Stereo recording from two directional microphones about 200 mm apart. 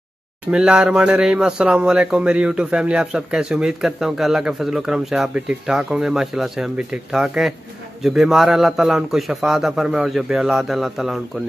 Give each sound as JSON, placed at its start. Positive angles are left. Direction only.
{"t": 0.5, "sound": "speech", "side_deg": -5}